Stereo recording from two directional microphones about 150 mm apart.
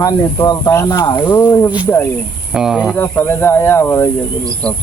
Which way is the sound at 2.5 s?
5° right (ahead or behind).